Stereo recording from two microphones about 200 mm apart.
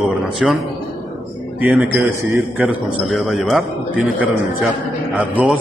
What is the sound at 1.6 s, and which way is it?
A man's voice, 10° right (ahead or behind).